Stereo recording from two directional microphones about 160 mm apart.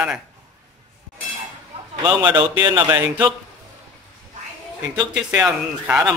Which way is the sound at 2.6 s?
20° right (ahead or behind).